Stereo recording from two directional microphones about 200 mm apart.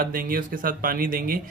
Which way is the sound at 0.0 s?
45° right (ahead or behind).